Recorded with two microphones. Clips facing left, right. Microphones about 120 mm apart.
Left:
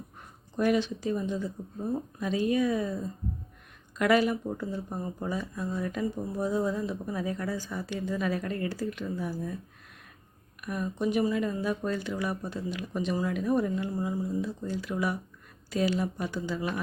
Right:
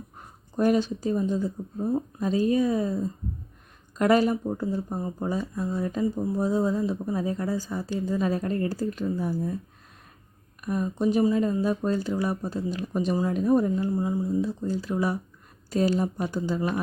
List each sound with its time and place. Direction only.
0.5 s speech: 40° right (ahead or behind)
10.6 s speech: 30° right (ahead or behind)
13.9 s speech: 25° right (ahead or behind)
14.7 s speech: 35° right (ahead or behind)